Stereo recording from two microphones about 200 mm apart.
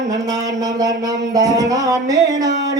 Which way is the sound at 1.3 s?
15° right (ahead or behind).